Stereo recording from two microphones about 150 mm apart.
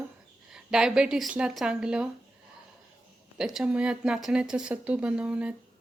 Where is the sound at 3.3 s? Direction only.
5° right (ahead or behind).